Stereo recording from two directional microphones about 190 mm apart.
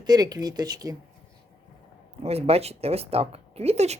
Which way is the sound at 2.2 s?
30° right (ahead or behind).